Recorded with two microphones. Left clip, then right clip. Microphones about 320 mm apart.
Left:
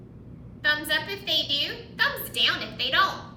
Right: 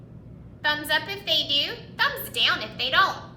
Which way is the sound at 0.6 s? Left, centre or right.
Centre.